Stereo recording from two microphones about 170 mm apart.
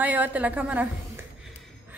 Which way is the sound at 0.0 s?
10° right (ahead or behind).